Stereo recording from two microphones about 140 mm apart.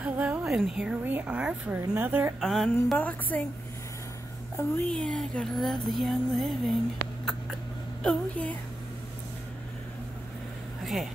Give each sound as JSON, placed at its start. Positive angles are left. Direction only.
{"t": 0.0, "sound": "a woman's voice", "side_deg": -10}
{"t": 2.4, "sound": "music", "side_deg": 0}
{"t": 3.0, "sound": "a woman's voice", "side_deg": 10}
{"t": 4.6, "sound": "a woman's voice", "side_deg": 15}
{"t": 4.9, "sound": "music", "side_deg": 5}
{"t": 8.0, "sound": "a woman's voice", "side_deg": 5}
{"t": 10.8, "sound": "a sound", "side_deg": 0}